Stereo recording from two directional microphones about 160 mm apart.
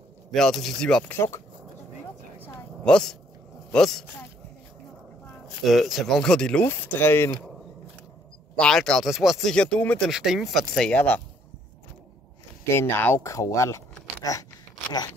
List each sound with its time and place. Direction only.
0.3 s speech: centre (ahead or behind)
2.4 s a sound: 5° left (ahead or behind)
3.7 s speech: 5° left (ahead or behind)
5.6 s speech: centre (ahead or behind)
8.5 s speech: 5° left (ahead or behind)
10.0 s speech: centre (ahead or behind)
12.6 s speech: 15° left (ahead or behind)